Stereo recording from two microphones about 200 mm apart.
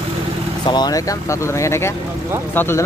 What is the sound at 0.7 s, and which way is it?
Speech, 20° left (ahead or behind).